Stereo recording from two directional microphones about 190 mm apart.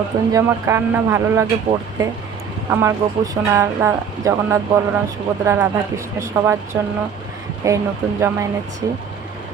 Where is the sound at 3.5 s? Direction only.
15° right (ahead or behind).